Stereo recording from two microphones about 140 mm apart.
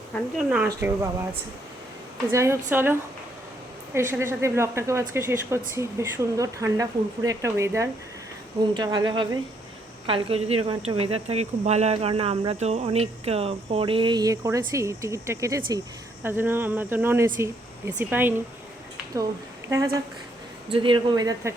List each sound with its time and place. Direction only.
0.3 s speech: 5° right (ahead or behind)
2.3 s speech: 20° right (ahead or behind)
8.7 s speech: 30° right (ahead or behind); by 18.3 s 15° right (ahead or behind)
19.6 s speech: 20° right (ahead or behind)
20.7 s speech: 40° right (ahead or behind)